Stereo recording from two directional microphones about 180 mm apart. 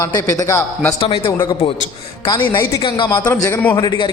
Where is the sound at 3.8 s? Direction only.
25° left (ahead or behind).